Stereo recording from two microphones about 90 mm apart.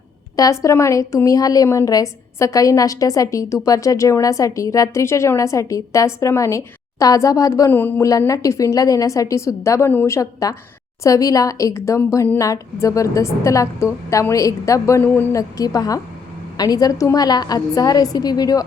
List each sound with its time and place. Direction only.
0.6 s a woman's voice: 35° left (ahead or behind)
7.7 s speech: 20° left (ahead or behind)
8.3 s a woman's voice: 35° left (ahead or behind)
15.0 s speech: 20° left (ahead or behind)
15.3 s a woman's voice: 40° left (ahead or behind)